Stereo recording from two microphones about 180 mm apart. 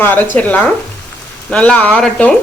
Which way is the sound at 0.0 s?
10° left (ahead or behind).